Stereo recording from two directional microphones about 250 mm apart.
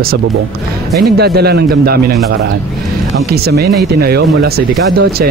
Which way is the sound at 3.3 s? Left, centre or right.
Right.